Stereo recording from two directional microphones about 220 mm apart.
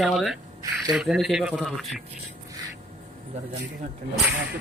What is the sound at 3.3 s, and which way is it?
Speech, 30° right (ahead or behind).